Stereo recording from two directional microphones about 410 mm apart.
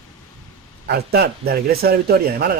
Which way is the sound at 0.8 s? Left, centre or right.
Right.